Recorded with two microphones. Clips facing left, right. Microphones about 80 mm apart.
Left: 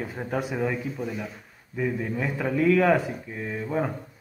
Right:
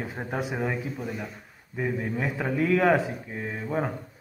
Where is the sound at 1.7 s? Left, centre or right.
Centre.